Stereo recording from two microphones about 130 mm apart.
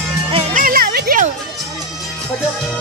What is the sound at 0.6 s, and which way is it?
Music, 90° right.